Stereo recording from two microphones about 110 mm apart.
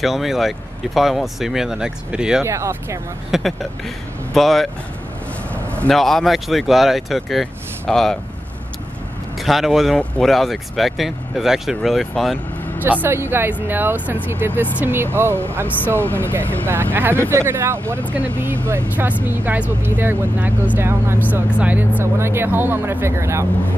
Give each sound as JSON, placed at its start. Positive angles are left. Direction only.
{"t": 0.0, "sound": "speech", "side_deg": 0}
{"t": 2.4, "sound": "speech", "side_deg": -25}
{"t": 3.3, "sound": "speech", "side_deg": -5}
{"t": 5.8, "sound": "speech", "side_deg": 0}
{"t": 9.4, "sound": "speech", "side_deg": 0}
{"t": 12.8, "sound": "speech", "side_deg": -15}
{"t": 16.0, "sound": "speech", "side_deg": 15}
{"t": 16.3, "sound": "speech", "side_deg": -20}